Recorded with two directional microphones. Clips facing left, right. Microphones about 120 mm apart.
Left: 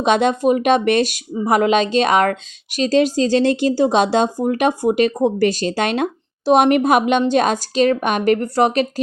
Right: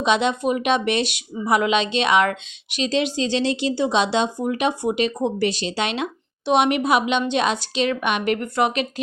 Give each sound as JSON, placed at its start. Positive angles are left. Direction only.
{"t": 0.0, "sound": "speech", "side_deg": 45}